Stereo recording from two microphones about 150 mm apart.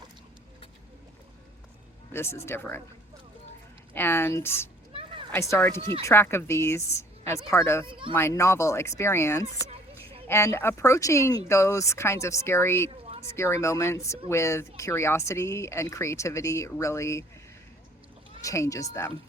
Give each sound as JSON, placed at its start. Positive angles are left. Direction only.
{"t": 2.1, "sound": "speech", "side_deg": 15}
{"t": 3.9, "sound": "speech", "side_deg": 15}
{"t": 4.9, "sound": "a sound", "side_deg": -35}
{"t": 5.3, "sound": "speech", "side_deg": 15}
{"t": 5.8, "sound": "speech", "side_deg": -35}
{"t": 6.1, "sound": "speech", "side_deg": 15}
{"t": 7.9, "sound": "speech", "side_deg": -35}
{"t": 8.1, "sound": "speech", "side_deg": 15}
{"t": 18.4, "sound": "speech", "side_deg": 20}